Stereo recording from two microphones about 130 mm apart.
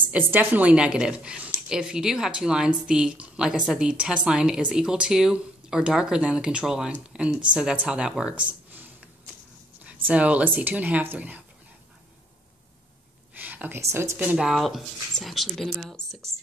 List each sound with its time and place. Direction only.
0.3 s speech: 15° right (ahead or behind)
13.3 s a sound: 15° right (ahead or behind)
14.1 s speech: 10° right (ahead or behind)
14.5 s speech: centre (ahead or behind)